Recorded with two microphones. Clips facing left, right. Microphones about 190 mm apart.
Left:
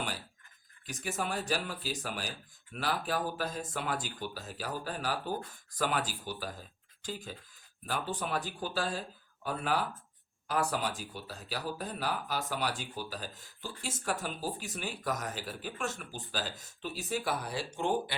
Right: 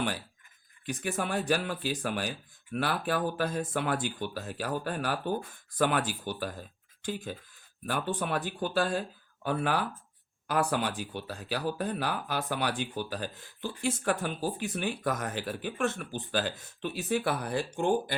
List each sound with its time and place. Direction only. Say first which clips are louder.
0.9 s speech: right 4 dB; 60° right (ahead or behind)